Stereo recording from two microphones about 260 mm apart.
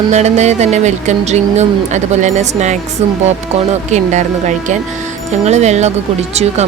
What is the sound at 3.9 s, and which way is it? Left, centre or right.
Speech, right.